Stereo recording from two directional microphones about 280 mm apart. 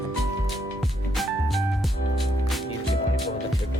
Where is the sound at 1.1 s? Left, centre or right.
Centre.